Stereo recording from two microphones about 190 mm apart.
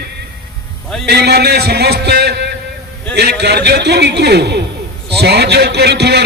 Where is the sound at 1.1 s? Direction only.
60° right (ahead or behind).